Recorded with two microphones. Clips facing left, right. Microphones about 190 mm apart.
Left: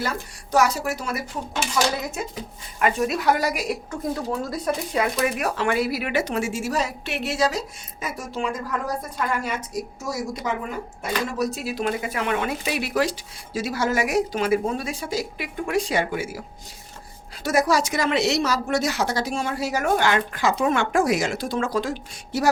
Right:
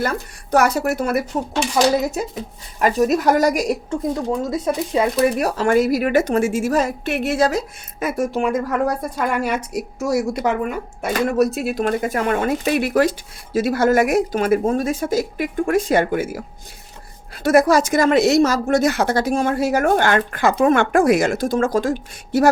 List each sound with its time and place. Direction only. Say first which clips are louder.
0.5 s speech: right 4 dB; 60° right (ahead or behind)
2.7 s a woman's voice: right 6 dB; 35° right (ahead or behind)
4.3 s speech: right 5 dB; 20° right (ahead or behind); by 8.6 s 55° right (ahead or behind)
9.1 s a woman's voice: right 6 dB; 65° right (ahead or behind); by 16.4 s 50° right (ahead or behind)
17.4 s speech: right 7 dB; 55° right (ahead or behind)